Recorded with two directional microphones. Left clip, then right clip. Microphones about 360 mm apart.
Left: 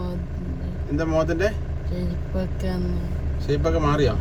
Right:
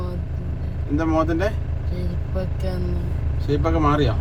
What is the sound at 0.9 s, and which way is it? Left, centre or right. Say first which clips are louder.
Speech: right 2 dB; centre.